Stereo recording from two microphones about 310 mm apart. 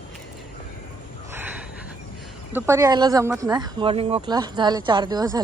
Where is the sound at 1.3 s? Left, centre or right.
Centre.